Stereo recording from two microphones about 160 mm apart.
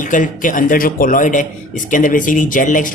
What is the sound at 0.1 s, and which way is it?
Speech, 55° left (ahead or behind).